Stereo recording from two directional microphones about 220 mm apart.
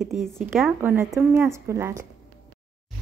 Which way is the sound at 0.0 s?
Centre (ahead or behind).